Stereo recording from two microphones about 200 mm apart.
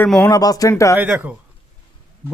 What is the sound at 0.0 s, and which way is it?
Speech, 5° left (ahead or behind).